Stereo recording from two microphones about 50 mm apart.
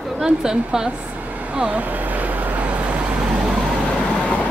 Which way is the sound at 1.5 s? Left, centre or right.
Right.